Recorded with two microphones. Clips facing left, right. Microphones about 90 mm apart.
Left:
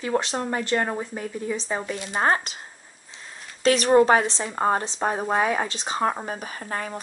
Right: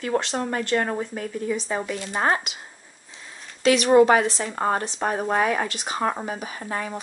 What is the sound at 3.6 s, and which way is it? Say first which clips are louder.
Speech: right 1 dB; 35° left (ahead or behind).